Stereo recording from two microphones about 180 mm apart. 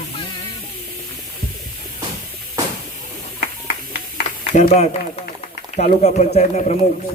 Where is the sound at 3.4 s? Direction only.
65° left (ahead or behind).